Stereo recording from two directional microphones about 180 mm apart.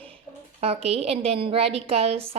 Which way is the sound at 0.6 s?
35° right (ahead or behind).